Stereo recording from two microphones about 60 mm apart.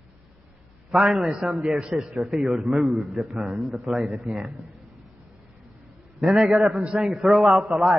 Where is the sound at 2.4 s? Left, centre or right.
Centre.